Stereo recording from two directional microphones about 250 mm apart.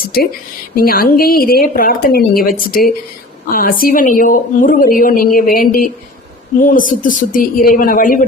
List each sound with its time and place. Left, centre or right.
0.8 s a woman's voice: left